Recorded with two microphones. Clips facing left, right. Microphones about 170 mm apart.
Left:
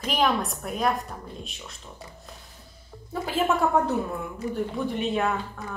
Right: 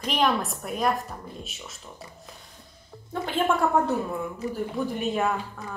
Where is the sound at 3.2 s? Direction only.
Centre (ahead or behind).